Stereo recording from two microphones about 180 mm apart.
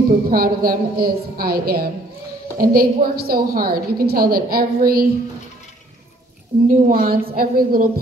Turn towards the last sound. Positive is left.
turn(degrees=-55)  # may be behind; listen again after turning